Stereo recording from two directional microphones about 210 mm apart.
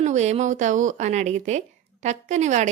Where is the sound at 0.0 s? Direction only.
35° right (ahead or behind).